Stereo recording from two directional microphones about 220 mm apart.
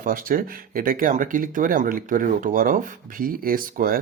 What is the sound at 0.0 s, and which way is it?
Speech, 40° right (ahead or behind).